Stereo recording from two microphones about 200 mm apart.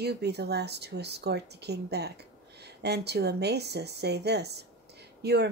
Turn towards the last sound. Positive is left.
turn(degrees=-55)  # may be behind; listen again after turning